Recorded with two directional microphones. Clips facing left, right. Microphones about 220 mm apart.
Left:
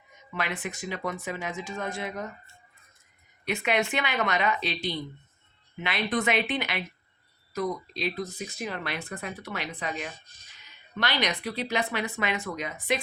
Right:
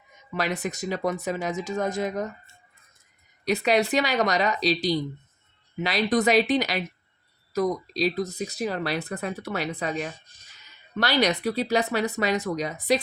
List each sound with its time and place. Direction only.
0.3 s speech: 40° right (ahead or behind)
3.4 s speech: 35° right (ahead or behind)